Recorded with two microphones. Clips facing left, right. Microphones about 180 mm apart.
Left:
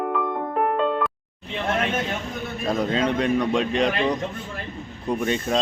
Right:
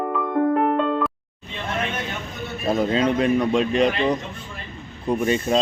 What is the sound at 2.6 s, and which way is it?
Speech, 5° right (ahead or behind).